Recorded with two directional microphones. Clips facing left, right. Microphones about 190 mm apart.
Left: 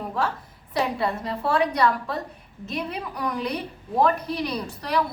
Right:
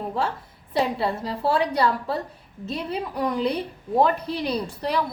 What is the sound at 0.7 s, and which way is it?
A woman's voice, 30° right (ahead or behind).